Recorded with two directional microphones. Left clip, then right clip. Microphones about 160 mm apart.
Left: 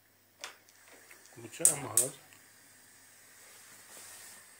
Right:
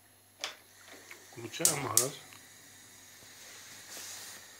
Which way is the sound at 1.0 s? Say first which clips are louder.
Right 5 dB; 10° left (ahead or behind).